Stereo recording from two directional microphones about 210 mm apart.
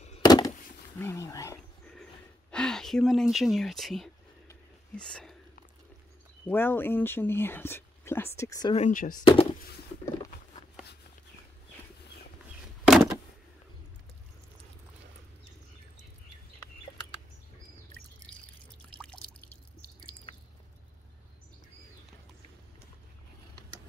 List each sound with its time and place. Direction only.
0.2 s a sound: 20° left (ahead or behind)
0.9 s roaring cats: 15° left (ahead or behind)
2.5 s speech: 5° left (ahead or behind)
4.5 s a sound: 5° left (ahead or behind)
6.4 s speech: 10° left (ahead or behind)
8.7 s speech: 35° left (ahead or behind)
9.2 s speech: 25° left (ahead or behind)
10.0 s patter: 15° left (ahead or behind)
12.8 s door: centre (ahead or behind)
18.9 s pour: 25° right (ahead or behind)